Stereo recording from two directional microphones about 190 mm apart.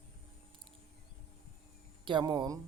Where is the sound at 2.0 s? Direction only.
25° right (ahead or behind).